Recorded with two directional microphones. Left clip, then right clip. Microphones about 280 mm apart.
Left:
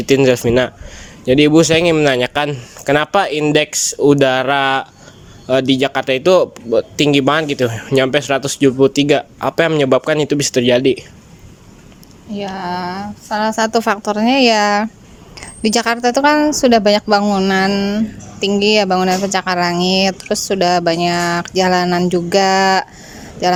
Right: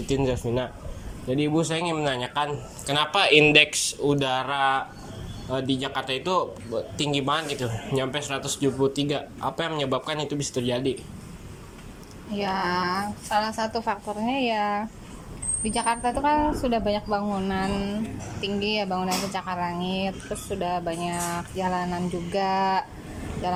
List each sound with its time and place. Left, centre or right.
0.0 s a woman's voice: left
12.4 s a sound: centre
13.3 s a woman's voice: left